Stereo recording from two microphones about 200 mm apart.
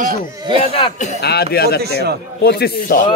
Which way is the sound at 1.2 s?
55° left (ahead or behind).